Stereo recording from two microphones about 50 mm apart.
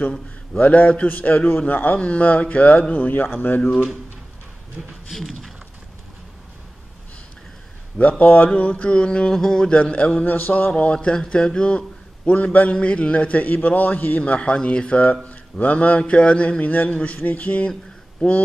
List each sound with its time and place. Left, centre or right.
0.6 s a man's voice: left
2.0 s a man's voice: left
4.8 s speech: right
5.1 s speech: centre
8.0 s a man's voice: left
9.4 s a man's voice: centre
9.7 s a man's voice: left
10.7 s a man's voice: centre
18.2 s a man's voice: centre